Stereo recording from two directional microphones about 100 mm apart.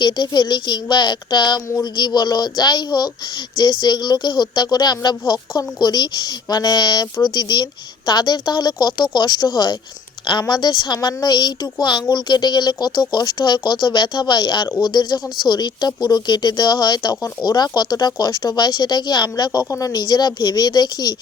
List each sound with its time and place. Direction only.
0.0 s speech: 45° left (ahead or behind)
19.6 s speech: 30° left (ahead or behind)
19.9 s speech: 50° left (ahead or behind)